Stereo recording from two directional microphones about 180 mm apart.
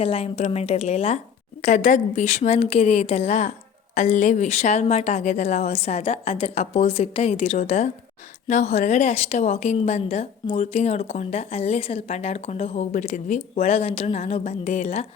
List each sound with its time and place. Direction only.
0.0 s a woman's voice: 35° left (ahead or behind)